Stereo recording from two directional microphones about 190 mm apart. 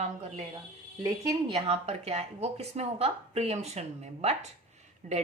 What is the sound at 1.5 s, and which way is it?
Speech, 35° right (ahead or behind).